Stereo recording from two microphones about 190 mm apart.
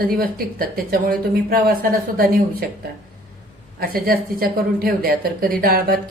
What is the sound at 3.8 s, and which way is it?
Speech, 50° right (ahead or behind).